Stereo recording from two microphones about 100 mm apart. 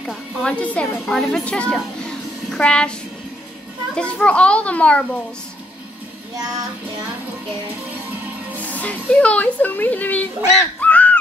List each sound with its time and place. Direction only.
0.0 s a sound: 5° right (ahead or behind)
0.5 s a woman's voice: 10° left (ahead or behind)
2.0 s music: 10° left (ahead or behind)
3.9 s a woman's voice: 10° left (ahead or behind)
8.5 s speech: 15° left (ahead or behind)